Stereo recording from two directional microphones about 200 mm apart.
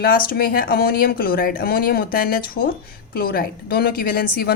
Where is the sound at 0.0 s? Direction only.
50° left (ahead or behind).